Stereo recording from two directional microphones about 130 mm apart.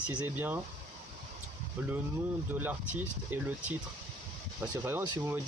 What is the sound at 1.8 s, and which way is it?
Speech, 15° right (ahead or behind).